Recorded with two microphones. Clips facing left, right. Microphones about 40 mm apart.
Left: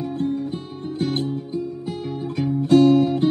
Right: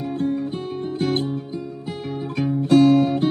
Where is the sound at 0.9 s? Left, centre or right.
Centre.